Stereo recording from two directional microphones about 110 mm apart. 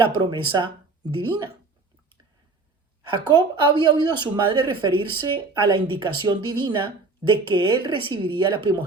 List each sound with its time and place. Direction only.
0.2 s a woman's voice: 40° right (ahead or behind)
3.1 s a woman's voice: 45° right (ahead or behind)